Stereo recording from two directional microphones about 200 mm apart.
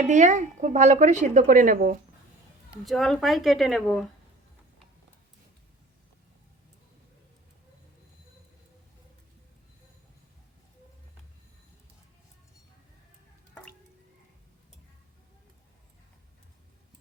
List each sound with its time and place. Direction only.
0.1 s speech: 40° right (ahead or behind)
2.6 s speech: centre (ahead or behind)